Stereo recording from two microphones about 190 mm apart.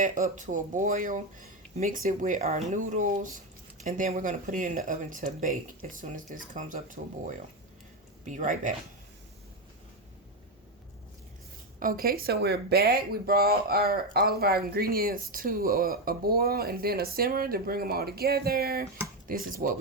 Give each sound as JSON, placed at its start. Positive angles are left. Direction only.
{"t": 0.0, "sound": "speech", "side_deg": -40}
{"t": 11.8, "sound": "speech", "side_deg": -50}